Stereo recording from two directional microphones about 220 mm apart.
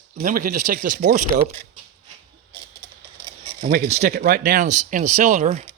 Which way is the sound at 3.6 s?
30° right (ahead or behind).